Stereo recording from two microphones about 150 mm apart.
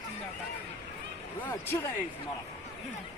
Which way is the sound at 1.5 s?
15° left (ahead or behind).